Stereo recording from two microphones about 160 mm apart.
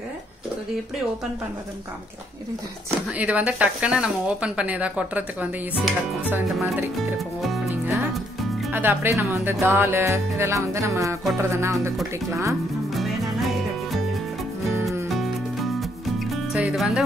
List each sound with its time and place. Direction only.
3.2 s speech: 10° right (ahead or behind)
7.0 s music: centre (ahead or behind)
7.7 s music: 10° right (ahead or behind)
8.7 s speech: 15° right (ahead or behind)
12.9 s music: centre (ahead or behind)
15.0 s music: centre (ahead or behind)